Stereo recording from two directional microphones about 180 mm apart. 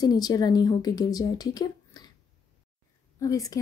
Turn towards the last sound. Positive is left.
turn(degrees=20)  # may be behind; listen again after turning